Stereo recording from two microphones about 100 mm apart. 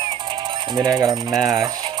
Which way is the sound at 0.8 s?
35° right (ahead or behind).